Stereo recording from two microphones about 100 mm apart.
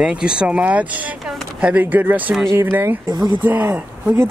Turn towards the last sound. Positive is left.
turn(degrees=-20)  # may be behind; listen again after turning